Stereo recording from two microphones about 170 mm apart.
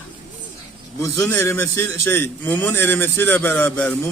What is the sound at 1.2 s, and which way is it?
A man's voice, 10° left (ahead or behind).